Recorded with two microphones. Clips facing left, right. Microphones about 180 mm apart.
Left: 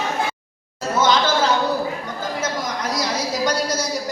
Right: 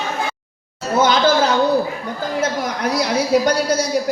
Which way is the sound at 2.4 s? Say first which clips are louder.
Right 4 dB; 60° right (ahead or behind).